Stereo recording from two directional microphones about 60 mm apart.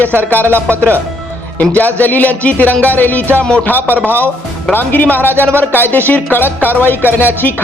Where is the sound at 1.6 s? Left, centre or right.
Left.